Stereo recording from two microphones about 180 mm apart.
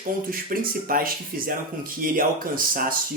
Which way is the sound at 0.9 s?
50° right (ahead or behind).